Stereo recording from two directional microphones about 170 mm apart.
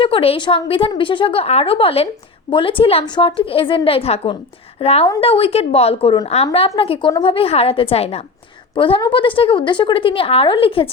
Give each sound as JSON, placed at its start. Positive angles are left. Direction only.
{"t": 0.0, "sound": "a woman's voice", "side_deg": 35}